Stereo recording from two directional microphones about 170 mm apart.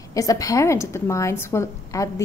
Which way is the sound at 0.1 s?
20° left (ahead or behind).